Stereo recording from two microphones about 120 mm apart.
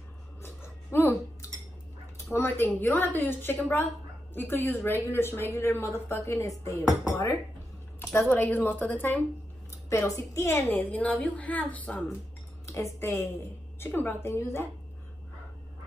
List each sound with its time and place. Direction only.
0.4 s a sound: 20° left (ahead or behind)
2.3 s a woman's voice: 20° left (ahead or behind)
8.1 s a woman's voice: 15° left (ahead or behind)
12.6 s a woman's voice: 25° left (ahead or behind)